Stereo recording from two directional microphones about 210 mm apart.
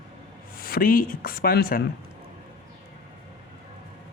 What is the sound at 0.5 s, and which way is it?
Speech, 45° left (ahead or behind).